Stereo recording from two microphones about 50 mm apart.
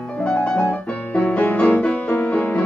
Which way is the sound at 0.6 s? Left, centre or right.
Left.